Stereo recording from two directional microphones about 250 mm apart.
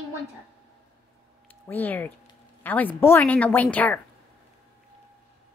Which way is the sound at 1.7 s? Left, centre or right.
Centre.